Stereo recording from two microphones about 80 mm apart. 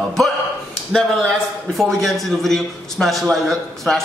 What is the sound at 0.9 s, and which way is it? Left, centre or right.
A man's voice, centre.